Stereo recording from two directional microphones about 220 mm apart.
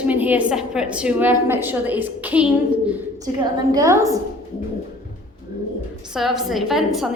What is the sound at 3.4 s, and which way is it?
Speech, 15° right (ahead or behind).